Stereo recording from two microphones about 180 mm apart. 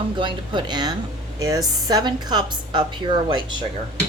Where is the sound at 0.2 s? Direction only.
25° right (ahead or behind).